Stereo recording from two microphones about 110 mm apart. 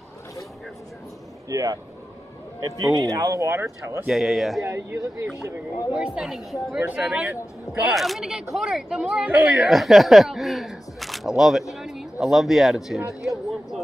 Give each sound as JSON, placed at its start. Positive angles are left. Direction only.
{"t": 1.5, "sound": "speech", "side_deg": -30}
{"t": 4.1, "sound": "speech", "side_deg": 0}
{"t": 4.6, "sound": "speech", "side_deg": -25}
{"t": 5.9, "sound": "speech", "side_deg": -5}